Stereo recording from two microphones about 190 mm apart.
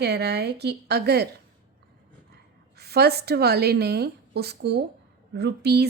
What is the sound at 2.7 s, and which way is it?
Speech, 60° right (ahead or behind).